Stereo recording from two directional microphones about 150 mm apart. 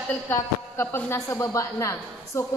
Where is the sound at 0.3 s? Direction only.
15° left (ahead or behind).